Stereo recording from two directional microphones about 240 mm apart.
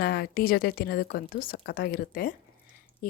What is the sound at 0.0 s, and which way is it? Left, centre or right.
A woman's voice, left.